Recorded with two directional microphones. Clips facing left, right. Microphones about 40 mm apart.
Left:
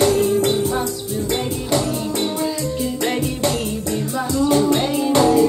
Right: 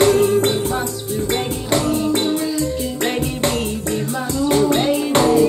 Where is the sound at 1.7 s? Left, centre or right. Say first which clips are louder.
Right 4 dB; right.